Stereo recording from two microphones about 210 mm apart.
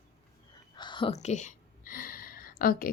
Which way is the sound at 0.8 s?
20° left (ahead or behind).